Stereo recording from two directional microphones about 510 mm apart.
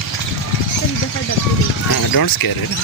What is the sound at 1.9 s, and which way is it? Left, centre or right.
Speech, left.